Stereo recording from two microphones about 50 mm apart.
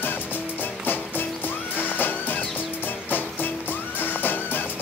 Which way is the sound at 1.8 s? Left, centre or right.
Left.